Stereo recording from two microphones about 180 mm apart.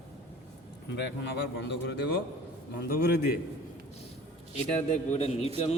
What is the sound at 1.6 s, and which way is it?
A man's voice, 70° left (ahead or behind).